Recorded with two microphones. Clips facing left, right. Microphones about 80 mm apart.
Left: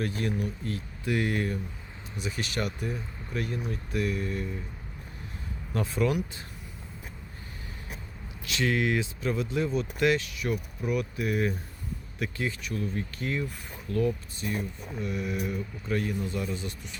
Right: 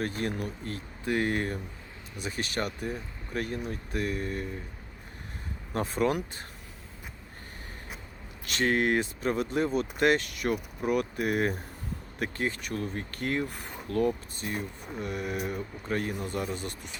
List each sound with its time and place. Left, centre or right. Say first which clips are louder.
0.0 s speech: left 1 dB; right
5.7 s speech: even; right
8.4 s speech: right 1 dB; right